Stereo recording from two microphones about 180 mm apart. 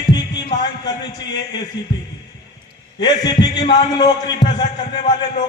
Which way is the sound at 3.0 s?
25° left (ahead or behind).